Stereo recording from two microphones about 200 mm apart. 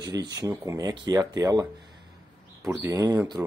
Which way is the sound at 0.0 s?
15° right (ahead or behind).